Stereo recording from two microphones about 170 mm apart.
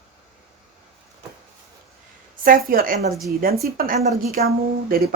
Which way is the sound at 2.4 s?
55° right (ahead or behind).